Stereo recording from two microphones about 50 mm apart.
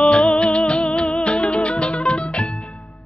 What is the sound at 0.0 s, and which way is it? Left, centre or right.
Music, left.